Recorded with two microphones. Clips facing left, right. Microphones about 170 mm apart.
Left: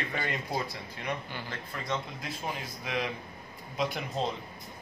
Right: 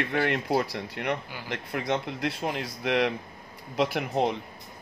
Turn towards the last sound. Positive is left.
turn(degrees=-65)  # may be behind; listen again after turning